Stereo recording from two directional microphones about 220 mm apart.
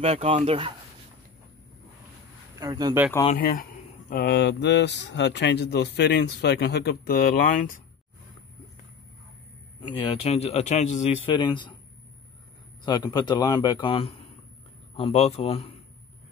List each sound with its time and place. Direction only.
0.0 s speech: 25° right (ahead or behind)
2.6 s speech: 15° right (ahead or behind)
3.3 s speech: 40° left (ahead or behind)
9.9 s speech: 25° left (ahead or behind)
12.8 s speech: 20° left (ahead or behind)